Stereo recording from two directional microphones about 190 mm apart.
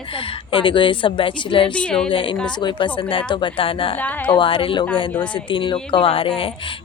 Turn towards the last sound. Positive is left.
turn(degrees=30)  # may be behind; listen again after turning